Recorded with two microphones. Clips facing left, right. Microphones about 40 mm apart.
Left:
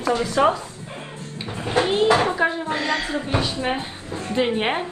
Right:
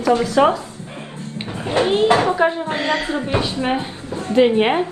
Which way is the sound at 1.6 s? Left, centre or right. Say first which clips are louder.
Right 3 dB; right.